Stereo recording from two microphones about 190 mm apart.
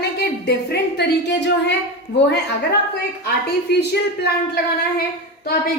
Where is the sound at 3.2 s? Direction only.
60° left (ahead or behind).